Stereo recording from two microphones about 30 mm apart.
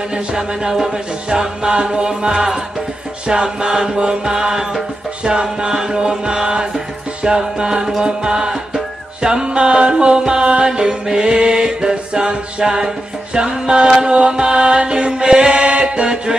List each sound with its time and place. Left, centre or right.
0.4 s music: centre